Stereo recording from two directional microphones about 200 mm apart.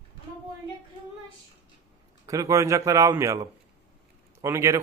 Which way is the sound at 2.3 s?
15° right (ahead or behind).